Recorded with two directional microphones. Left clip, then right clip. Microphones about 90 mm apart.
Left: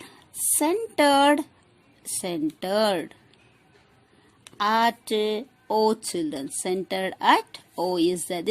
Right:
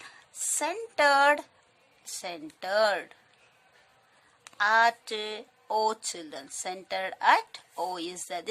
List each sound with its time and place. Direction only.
0.6 s speech: 40° left (ahead or behind)
4.5 s speech: 45° left (ahead or behind)